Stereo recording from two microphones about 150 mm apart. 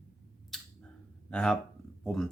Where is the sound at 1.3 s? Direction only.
5° left (ahead or behind).